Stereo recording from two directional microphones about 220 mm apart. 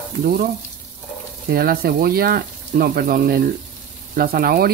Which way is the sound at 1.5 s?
45° right (ahead or behind).